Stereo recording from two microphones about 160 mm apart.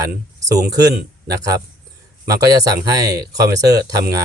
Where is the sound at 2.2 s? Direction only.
20° right (ahead or behind).